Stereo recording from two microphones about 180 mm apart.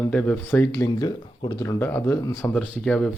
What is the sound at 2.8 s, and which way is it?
Speech, 5° left (ahead or behind).